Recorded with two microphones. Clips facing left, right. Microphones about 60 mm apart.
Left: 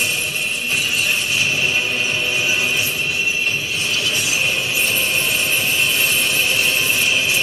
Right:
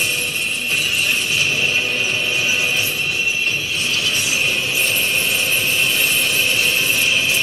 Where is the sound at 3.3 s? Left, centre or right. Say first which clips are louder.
Even; centre.